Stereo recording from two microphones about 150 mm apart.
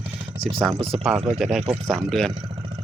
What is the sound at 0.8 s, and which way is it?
Speech, 40° right (ahead or behind).